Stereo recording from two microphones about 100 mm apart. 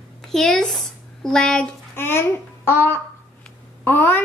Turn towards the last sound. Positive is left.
turn(degrees=20)  # may be behind; listen again after turning